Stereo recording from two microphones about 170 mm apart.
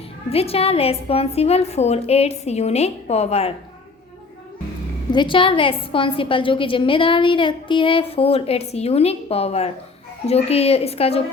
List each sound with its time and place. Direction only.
0.3 s a woman's voice: 35° left (ahead or behind)
5.1 s a woman's voice: 30° left (ahead or behind)